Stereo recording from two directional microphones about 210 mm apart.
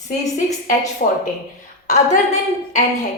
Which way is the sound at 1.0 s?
35° left (ahead or behind).